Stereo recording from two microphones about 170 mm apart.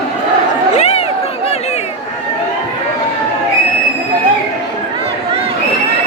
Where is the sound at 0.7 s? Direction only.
40° left (ahead or behind).